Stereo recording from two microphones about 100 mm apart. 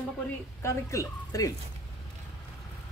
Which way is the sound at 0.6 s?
30° left (ahead or behind).